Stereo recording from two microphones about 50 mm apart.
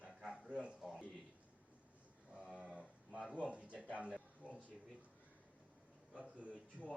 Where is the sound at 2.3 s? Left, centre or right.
Right.